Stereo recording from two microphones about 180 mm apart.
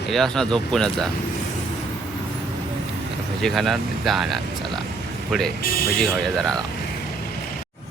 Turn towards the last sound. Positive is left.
turn(degrees=0)  # may be behind; listen again after turning